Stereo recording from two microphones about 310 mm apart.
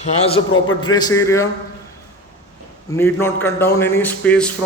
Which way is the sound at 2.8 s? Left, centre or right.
Centre.